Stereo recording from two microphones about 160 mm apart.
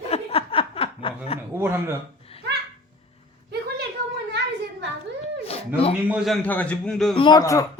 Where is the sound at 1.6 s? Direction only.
15° right (ahead or behind).